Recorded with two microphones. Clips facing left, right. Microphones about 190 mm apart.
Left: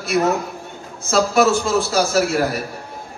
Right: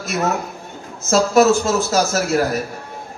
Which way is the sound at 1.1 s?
45° right (ahead or behind).